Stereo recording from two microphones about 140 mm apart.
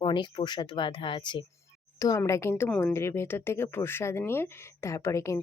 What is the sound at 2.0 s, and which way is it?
Speech, 25° left (ahead or behind).